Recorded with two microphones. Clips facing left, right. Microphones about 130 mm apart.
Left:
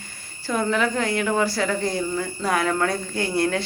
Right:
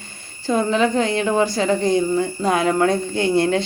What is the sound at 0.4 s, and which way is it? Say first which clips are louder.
Speech: right 4 dB; 20° right (ahead or behind).